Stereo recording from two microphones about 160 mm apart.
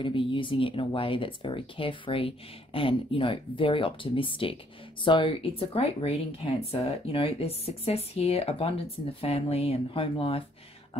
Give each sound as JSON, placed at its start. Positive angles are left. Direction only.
{"t": 0.0, "sound": "speech", "side_deg": 30}